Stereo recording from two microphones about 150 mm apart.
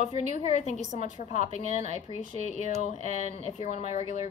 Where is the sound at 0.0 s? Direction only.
45° left (ahead or behind).